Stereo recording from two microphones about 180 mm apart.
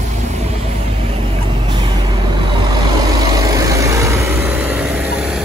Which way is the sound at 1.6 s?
25° right (ahead or behind).